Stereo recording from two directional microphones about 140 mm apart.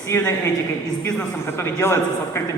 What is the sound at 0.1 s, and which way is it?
A man's voice, 20° left (ahead or behind).